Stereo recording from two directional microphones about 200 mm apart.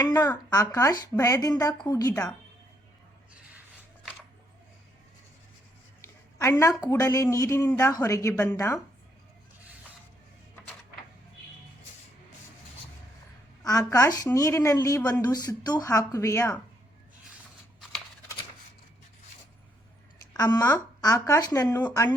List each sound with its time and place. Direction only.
0.3 s a woman's voice: 15° left (ahead or behind)
6.4 s a woman's voice: 15° left (ahead or behind)
13.6 s a woman's voice: 15° left (ahead or behind)
20.3 s a woman's voice: 20° left (ahead or behind)